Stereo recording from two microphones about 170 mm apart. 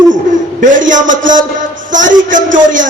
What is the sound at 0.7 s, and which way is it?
A man's voice, 50° right (ahead or behind).